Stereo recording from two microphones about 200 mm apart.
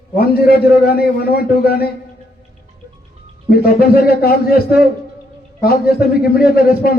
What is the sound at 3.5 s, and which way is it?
A man's voice, 50° left (ahead or behind).